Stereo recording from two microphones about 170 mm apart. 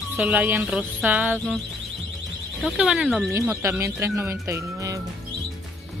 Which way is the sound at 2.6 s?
5° right (ahead or behind).